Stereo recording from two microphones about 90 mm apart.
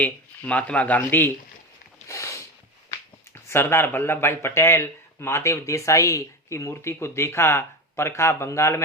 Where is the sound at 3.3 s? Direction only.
25° left (ahead or behind).